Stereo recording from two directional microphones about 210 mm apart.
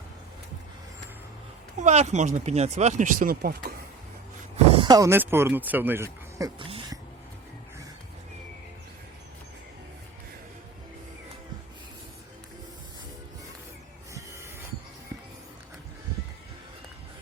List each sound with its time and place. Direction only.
1.8 s speech: 35° right (ahead or behind)
4.5 s speech: 25° right (ahead or behind)
6.6 s a sound: 25° right (ahead or behind)